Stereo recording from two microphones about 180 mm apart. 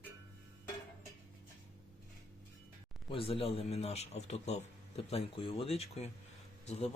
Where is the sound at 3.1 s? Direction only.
30° left (ahead or behind).